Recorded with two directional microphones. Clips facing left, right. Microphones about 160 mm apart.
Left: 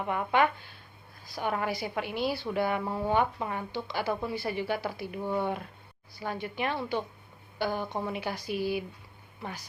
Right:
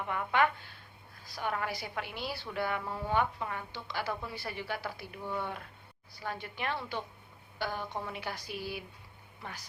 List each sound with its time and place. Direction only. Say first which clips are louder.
0.1 s a woman's voice: left 3 dB; 20° left (ahead or behind)